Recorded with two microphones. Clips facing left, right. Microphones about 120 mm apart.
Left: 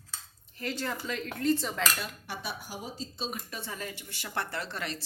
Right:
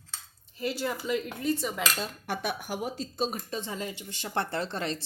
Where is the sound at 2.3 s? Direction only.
55° right (ahead or behind).